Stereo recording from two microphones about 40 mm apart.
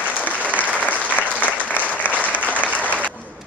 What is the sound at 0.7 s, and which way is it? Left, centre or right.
Applause, left.